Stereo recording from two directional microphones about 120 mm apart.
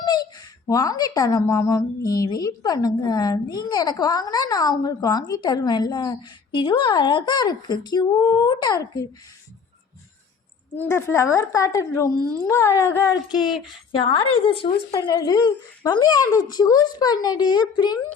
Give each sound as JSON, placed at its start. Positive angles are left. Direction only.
{"t": 0.7, "sound": "a woman's voice", "side_deg": 30}
{"t": 10.8, "sound": "a woman's voice", "side_deg": 20}
{"t": 13.1, "sound": "a sound", "side_deg": -5}
{"t": 13.9, "sound": "a woman's voice", "side_deg": 45}
{"t": 14.9, "sound": "a woman's voice", "side_deg": 35}